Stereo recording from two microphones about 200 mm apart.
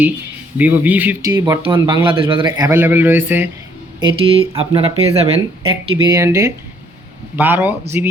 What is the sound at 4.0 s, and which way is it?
Speech, 20° right (ahead or behind).